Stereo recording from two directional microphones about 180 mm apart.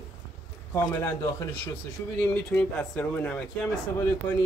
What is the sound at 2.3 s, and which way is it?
Speech, 10° left (ahead or behind).